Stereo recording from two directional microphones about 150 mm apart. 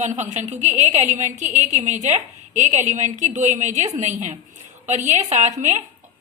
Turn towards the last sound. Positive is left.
turn(degrees=-50)  # may be behind; listen again after turning